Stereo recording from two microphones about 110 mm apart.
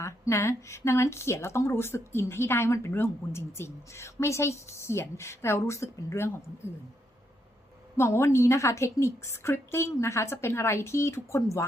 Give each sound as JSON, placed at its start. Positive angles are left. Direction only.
{"t": 0.0, "sound": "speech", "side_deg": 25}
{"t": 7.9, "sound": "speech", "side_deg": 25}